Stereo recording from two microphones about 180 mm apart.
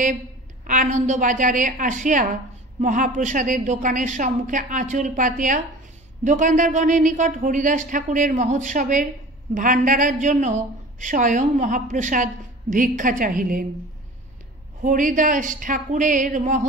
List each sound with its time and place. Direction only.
0.7 s a woman's voice: 45° right (ahead or behind)
14.8 s a woman's voice: 45° right (ahead or behind)